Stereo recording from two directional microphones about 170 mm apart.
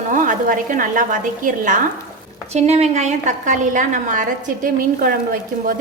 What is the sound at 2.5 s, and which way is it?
A woman's voice, 40° right (ahead or behind).